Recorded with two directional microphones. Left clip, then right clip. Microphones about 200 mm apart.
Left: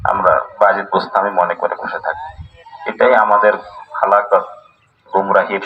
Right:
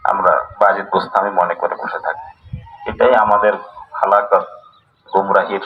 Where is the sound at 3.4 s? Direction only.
15° right (ahead or behind).